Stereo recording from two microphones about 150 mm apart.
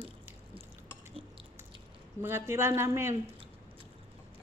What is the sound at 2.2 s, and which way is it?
Speech, 15° right (ahead or behind).